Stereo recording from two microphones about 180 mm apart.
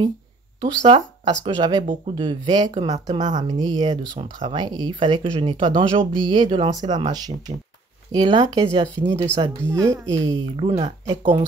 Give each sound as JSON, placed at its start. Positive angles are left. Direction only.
{"t": 0.6, "sound": "speech", "side_deg": -25}